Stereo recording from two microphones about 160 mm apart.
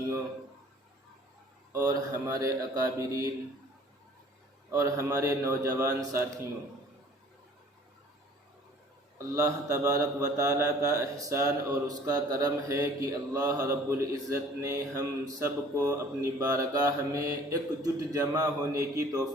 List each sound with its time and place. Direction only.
1.7 s a man's voice: 20° right (ahead or behind)
4.7 s a man's voice: 20° right (ahead or behind)
9.1 s a man's voice: 20° right (ahead or behind)